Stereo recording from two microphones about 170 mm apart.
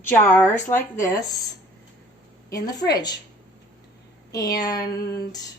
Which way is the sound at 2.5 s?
20° left (ahead or behind).